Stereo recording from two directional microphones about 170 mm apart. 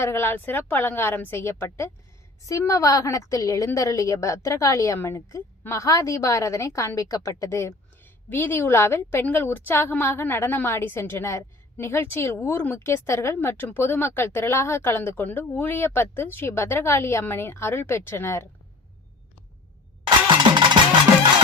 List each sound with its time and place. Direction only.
0.0 s a woman's voice: 15° left (ahead or behind)